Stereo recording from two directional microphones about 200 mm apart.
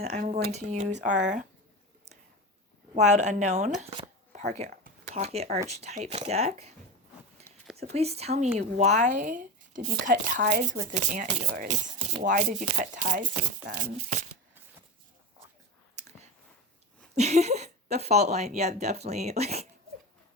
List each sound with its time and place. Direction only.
0.0 s speech: 35° right (ahead or behind)
2.9 s speech: 35° right (ahead or behind)
4.3 s a sound: 35° right (ahead or behind)
5.6 s speech: 35° right (ahead or behind)
7.8 s speech: 30° right (ahead or behind)
17.2 s speech: 35° right (ahead or behind)